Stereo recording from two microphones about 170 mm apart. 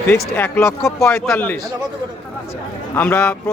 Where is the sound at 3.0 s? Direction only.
10° left (ahead or behind).